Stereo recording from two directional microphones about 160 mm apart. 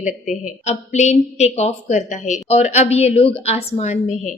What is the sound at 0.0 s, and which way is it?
A woman's voice, 50° left (ahead or behind).